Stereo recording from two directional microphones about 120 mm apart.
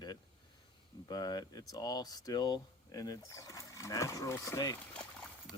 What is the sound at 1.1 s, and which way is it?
Speech, 35° left (ahead or behind).